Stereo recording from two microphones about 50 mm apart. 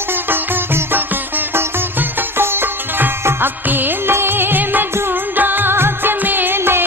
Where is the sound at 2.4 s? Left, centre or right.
Right.